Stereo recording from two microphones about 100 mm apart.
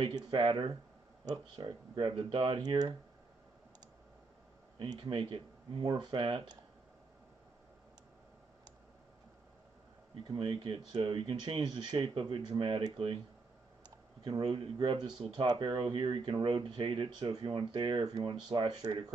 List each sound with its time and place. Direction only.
0.0 s speech: 55° right (ahead or behind)
4.7 s speech: 60° right (ahead or behind)
5.9 s speech: 50° right (ahead or behind)
10.2 s speech: 55° right (ahead or behind)
11.6 s speech: 45° right (ahead or behind)
12.2 s speech: 55° right (ahead or behind)
13.8 s clicking: 50° right (ahead or behind)
14.9 s speech: 60° right (ahead or behind)
15.4 s speech: 50° right (ahead or behind)